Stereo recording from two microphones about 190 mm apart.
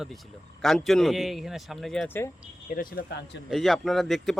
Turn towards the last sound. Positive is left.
turn(degrees=0)  # may be behind; listen again after turning